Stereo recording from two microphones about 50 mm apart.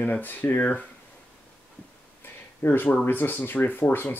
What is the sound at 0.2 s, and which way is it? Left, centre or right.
Speech, left.